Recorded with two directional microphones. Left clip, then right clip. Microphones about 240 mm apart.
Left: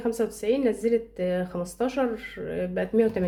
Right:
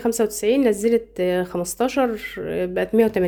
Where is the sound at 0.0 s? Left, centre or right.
Right.